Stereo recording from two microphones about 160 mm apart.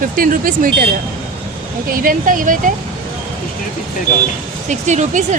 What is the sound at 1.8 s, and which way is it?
Speech, 60° right (ahead or behind).